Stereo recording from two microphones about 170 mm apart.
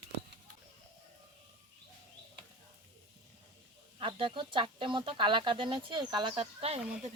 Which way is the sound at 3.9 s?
30° right (ahead or behind).